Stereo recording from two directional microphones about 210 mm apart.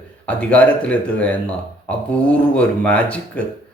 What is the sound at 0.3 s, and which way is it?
Speech, 5° left (ahead or behind).